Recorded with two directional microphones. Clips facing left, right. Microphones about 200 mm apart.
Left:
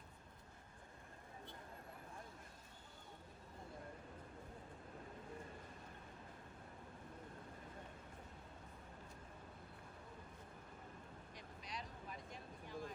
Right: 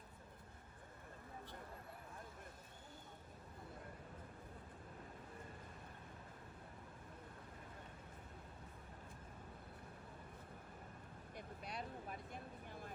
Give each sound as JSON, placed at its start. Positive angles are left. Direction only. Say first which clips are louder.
{"t": 11.3, "sound": "vehicle", "louder": "right 4 dB", "side_deg": -55}